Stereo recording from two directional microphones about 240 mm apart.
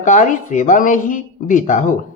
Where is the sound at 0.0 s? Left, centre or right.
Left.